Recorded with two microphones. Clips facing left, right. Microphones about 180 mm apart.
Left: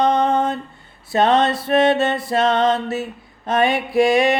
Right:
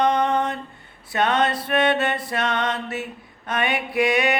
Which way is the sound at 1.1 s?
30° left (ahead or behind).